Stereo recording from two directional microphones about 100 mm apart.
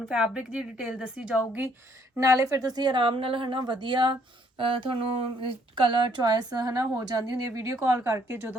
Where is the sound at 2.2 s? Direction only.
35° right (ahead or behind); by 4.1 s 50° right (ahead or behind).